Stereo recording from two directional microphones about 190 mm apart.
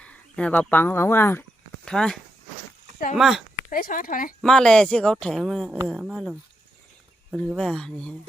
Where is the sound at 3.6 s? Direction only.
45° left (ahead or behind).